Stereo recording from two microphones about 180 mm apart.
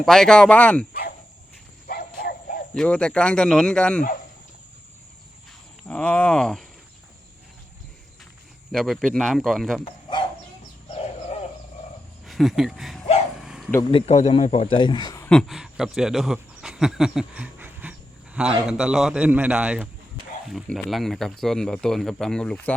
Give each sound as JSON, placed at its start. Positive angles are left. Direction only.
{"t": 0.0, "sound": "speech", "side_deg": 5}
{"t": 1.9, "sound": "a sound", "side_deg": 55}
{"t": 2.7, "sound": "speech", "side_deg": 5}
{"t": 5.9, "sound": "speech", "side_deg": 5}
{"t": 8.7, "sound": "speech", "side_deg": 0}
{"t": 10.9, "sound": "chicken", "side_deg": 35}
{"t": 12.2, "sound": "speech", "side_deg": 0}
{"t": 13.4, "sound": "a sound", "side_deg": 0}
{"t": 13.9, "sound": "a man's voice", "side_deg": 35}
{"t": 15.3, "sound": "speech", "side_deg": 0}